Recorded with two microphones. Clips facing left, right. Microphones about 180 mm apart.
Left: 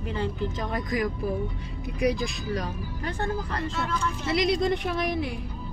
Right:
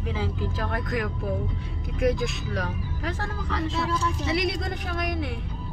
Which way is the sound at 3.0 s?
90° right.